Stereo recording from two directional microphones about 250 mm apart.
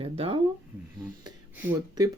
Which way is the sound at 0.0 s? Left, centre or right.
Right.